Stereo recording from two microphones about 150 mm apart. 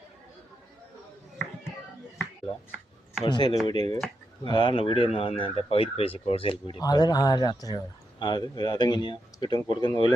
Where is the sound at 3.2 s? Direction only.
30° left (ahead or behind).